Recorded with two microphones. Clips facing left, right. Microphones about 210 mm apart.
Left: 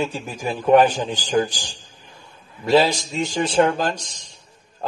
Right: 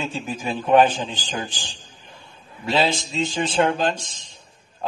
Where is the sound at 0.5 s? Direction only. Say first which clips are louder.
Left 2 dB; 40° left (ahead or behind).